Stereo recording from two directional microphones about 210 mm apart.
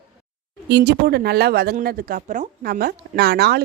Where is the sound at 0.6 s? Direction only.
50° right (ahead or behind).